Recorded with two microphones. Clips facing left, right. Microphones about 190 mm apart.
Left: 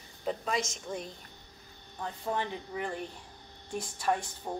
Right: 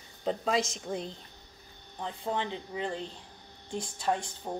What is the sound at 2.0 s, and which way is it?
Speech, 20° right (ahead or behind).